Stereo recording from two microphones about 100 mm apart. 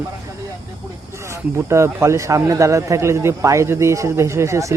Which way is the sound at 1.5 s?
30° right (ahead or behind).